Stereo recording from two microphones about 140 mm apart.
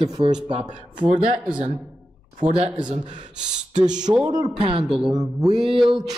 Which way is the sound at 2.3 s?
65° right (ahead or behind).